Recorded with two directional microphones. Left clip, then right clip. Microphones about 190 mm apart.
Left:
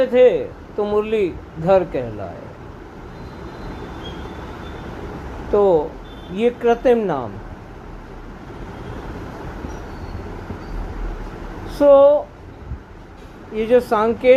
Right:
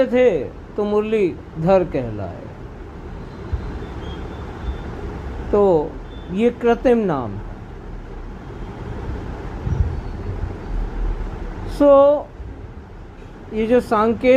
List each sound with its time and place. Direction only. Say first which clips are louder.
0.0 s speech: left 2 dB; 20° right (ahead or behind)
5.5 s speech: even; 20° right (ahead or behind)
11.7 s speech: left 1 dB; 20° right (ahead or behind)
13.5 s speech: left 1 dB; 20° right (ahead or behind)